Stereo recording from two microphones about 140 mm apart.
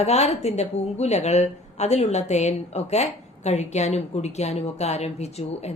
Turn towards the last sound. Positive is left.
turn(degrees=50)  # may be behind; listen again after turning